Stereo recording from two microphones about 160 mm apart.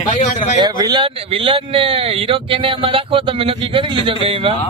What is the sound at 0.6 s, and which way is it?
A man's voice, 25° right (ahead or behind).